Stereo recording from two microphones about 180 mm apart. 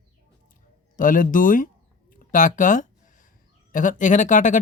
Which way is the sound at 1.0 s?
45° left (ahead or behind).